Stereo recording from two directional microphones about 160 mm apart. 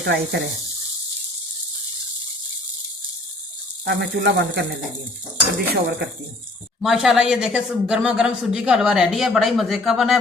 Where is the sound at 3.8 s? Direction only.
90° right.